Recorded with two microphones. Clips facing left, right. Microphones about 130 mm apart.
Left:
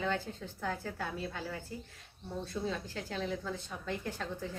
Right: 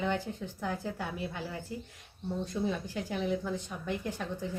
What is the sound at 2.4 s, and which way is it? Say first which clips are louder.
A woman's voice: right 3 dB; 15° right (ahead or behind).